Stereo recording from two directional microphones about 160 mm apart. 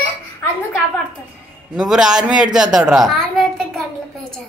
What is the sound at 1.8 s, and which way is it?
A child's voice, 5° right (ahead or behind).